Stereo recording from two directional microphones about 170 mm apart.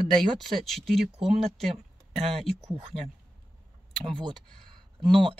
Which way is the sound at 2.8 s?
35° right (ahead or behind).